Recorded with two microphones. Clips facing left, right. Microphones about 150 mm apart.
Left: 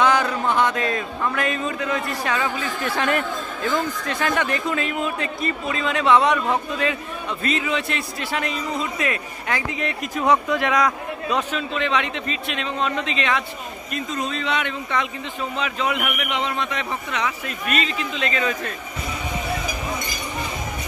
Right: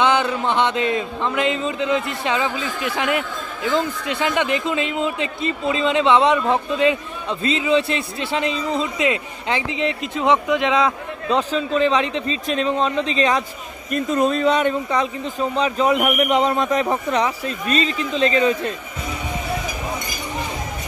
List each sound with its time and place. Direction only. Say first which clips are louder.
0.0 s a man's voice: right 1 dB; 25° right (ahead or behind)
13.9 s speech: right 9 dB; 50° right (ahead or behind); by 18.7 s 30° right (ahead or behind)